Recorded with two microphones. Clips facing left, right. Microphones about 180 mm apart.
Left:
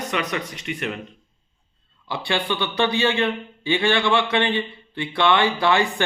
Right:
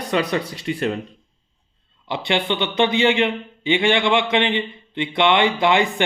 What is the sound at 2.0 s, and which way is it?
A man's voice, 20° right (ahead or behind).